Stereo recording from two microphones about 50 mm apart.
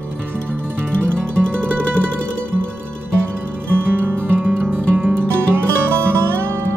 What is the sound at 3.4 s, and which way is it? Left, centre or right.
Music, right.